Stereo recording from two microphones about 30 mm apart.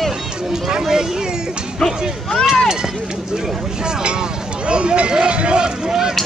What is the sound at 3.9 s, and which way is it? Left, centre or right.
Speech, right.